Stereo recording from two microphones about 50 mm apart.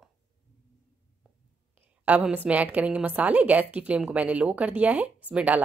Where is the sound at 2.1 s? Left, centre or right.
Right.